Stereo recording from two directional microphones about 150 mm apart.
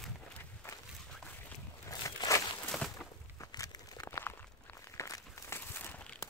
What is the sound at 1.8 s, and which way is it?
Walk, 20° left (ahead or behind).